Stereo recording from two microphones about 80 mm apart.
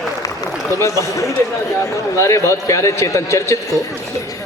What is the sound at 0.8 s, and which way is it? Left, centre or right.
A man's voice, left.